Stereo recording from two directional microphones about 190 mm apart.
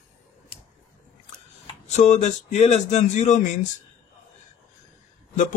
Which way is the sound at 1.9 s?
40° left (ahead or behind).